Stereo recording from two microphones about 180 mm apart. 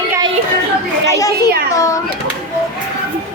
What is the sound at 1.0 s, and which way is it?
Children playing, 20° left (ahead or behind).